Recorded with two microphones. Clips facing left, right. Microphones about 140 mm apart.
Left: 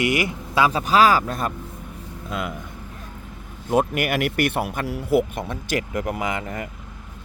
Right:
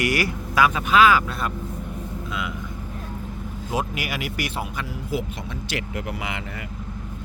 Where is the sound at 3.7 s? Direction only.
55° left (ahead or behind).